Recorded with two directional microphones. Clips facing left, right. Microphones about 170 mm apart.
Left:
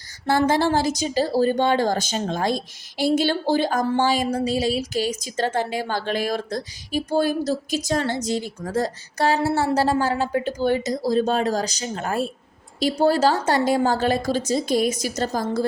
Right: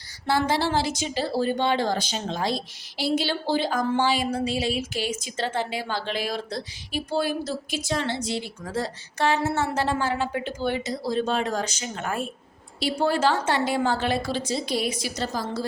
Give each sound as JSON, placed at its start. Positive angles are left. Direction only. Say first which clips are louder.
{"t": 0.3, "sound": "a woman's voice", "louder": "left 4 dB", "side_deg": 50}